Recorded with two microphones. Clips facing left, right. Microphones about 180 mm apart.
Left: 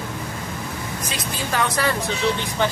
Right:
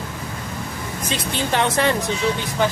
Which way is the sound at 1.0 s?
30° right (ahead or behind).